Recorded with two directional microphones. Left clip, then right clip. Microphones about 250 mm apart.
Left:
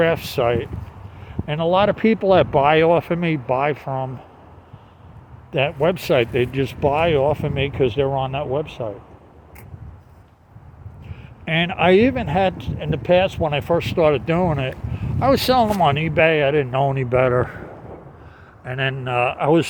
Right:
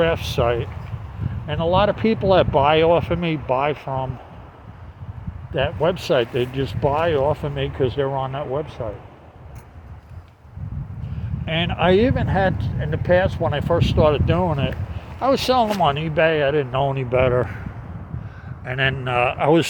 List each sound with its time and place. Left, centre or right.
0.0 s speech: left
5.5 s speech: left
11.4 s speech: left
18.6 s speech: centre